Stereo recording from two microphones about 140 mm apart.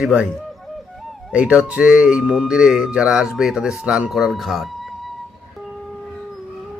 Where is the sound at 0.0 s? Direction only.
5° right (ahead or behind).